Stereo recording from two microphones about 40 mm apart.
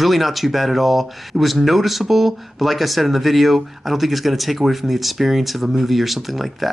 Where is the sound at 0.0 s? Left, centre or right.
Centre.